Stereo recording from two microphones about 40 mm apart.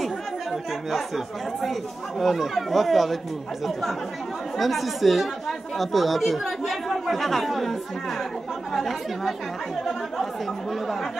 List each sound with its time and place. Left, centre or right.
0.0 s speech: centre
4.6 s speech: centre
8.7 s speech: centre